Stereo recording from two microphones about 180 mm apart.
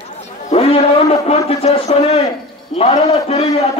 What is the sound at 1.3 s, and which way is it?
A man's voice, 35° left (ahead or behind).